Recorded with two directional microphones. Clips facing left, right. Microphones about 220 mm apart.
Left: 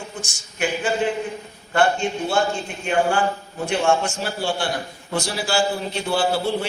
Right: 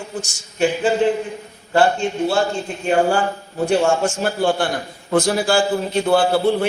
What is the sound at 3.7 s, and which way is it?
A man's voice, 45° right (ahead or behind).